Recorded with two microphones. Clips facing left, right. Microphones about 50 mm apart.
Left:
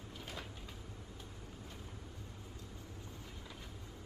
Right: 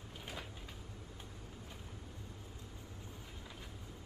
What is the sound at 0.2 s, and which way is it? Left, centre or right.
Cupboard open or close, centre.